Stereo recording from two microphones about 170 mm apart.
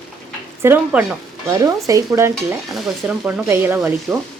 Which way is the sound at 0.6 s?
10° right (ahead or behind).